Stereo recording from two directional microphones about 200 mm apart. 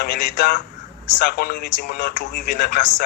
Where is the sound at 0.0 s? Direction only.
50° left (ahead or behind).